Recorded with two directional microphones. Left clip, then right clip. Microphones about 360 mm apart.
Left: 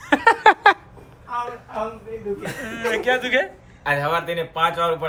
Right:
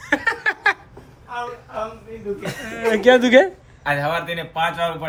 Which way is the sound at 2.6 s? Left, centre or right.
Centre.